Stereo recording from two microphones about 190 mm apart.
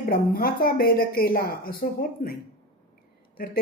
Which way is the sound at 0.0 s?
50° left (ahead or behind).